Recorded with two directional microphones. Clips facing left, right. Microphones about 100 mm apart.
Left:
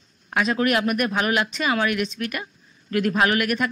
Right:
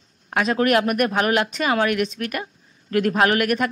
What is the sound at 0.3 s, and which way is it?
Speech, 45° right (ahead or behind).